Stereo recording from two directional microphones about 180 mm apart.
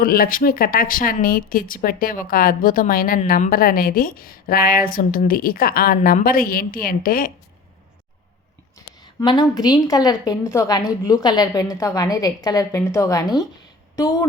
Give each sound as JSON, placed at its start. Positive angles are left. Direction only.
{"t": 0.0, "sound": "speech", "side_deg": 55}
{"t": 8.8, "sound": "a sound", "side_deg": 20}
{"t": 9.2, "sound": "a woman's voice", "side_deg": 20}